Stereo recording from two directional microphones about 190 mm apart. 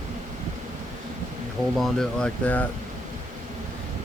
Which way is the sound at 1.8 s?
5° left (ahead or behind).